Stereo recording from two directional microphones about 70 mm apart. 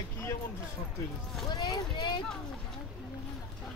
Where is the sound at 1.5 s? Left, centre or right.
Left.